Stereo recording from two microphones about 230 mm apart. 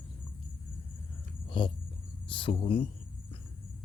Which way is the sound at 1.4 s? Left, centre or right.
Left.